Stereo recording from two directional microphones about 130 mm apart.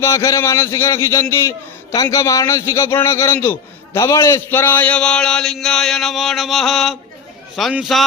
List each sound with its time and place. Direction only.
0.0 s a man's voice: 25° left (ahead or behind); by 8.0 s 5° right (ahead or behind)